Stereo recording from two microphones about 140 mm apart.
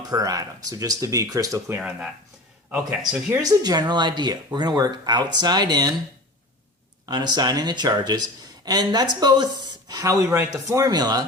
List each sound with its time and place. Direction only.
0.1 s speech: 25° right (ahead or behind)
3.0 s speech: 5° right (ahead or behind)
3.4 s speech: 25° right (ahead or behind)
7.0 s speech: 30° right (ahead or behind)